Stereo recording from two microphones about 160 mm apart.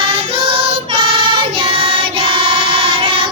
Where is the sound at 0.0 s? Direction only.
35° right (ahead or behind).